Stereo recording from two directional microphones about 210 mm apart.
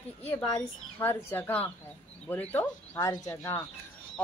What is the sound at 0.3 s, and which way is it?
Speech, 15° left (ahead or behind).